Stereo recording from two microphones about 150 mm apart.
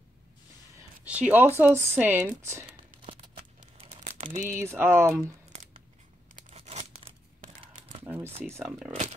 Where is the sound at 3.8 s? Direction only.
45° right (ahead or behind).